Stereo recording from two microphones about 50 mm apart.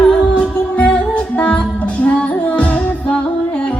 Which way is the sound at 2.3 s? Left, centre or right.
Left.